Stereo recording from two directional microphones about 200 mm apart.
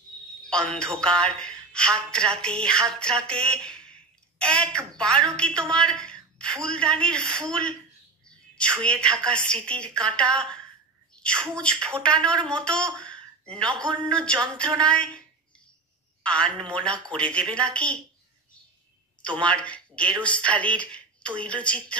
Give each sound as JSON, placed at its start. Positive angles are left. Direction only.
{"t": 0.4, "sound": "speech", "side_deg": 5}
{"t": 19.2, "sound": "speech", "side_deg": 5}